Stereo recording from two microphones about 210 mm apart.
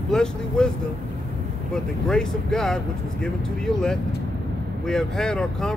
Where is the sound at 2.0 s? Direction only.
Centre (ahead or behind).